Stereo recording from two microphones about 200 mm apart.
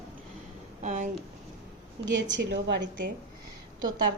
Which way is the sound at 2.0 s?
60° right (ahead or behind).